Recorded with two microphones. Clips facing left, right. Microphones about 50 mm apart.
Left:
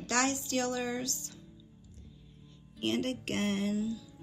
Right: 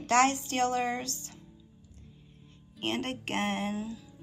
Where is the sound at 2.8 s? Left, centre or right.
Right.